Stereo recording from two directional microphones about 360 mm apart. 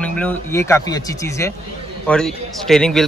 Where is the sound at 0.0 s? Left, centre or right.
Centre.